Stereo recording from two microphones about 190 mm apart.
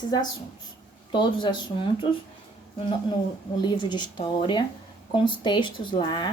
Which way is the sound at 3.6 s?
20° left (ahead or behind).